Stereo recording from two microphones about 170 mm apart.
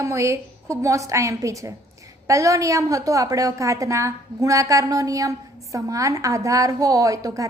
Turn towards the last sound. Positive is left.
turn(degrees=-20)  # may be behind; listen again after turning